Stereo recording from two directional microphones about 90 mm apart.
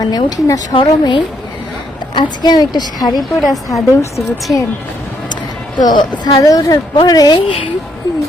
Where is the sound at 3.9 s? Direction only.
35° left (ahead or behind).